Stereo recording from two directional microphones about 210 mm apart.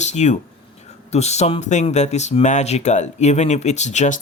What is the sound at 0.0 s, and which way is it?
Speech, 35° left (ahead or behind).